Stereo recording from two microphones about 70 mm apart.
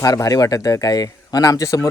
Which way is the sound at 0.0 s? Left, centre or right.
Left.